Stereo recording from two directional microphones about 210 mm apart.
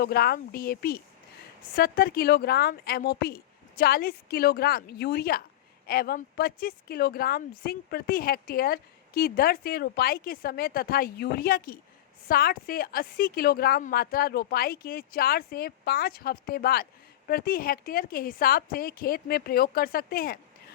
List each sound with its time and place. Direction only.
0.0 s speech: 45° left (ahead or behind)